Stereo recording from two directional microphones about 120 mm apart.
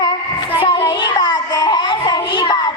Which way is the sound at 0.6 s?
40° left (ahead or behind).